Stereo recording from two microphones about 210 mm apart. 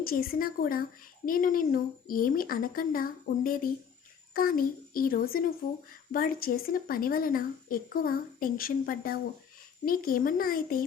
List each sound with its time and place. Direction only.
0.0 s speech: 45° left (ahead or behind)